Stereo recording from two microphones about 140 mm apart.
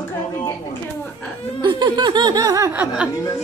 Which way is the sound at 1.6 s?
30° right (ahead or behind).